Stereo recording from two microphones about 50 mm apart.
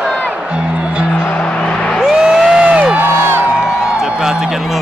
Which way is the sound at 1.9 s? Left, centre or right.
Centre.